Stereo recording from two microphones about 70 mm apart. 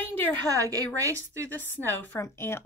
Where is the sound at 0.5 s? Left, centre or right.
Right.